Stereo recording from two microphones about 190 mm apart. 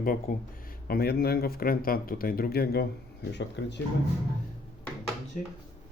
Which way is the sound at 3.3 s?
65° left (ahead or behind).